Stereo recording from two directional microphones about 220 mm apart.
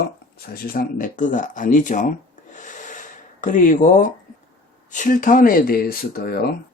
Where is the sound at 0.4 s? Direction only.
45° left (ahead or behind).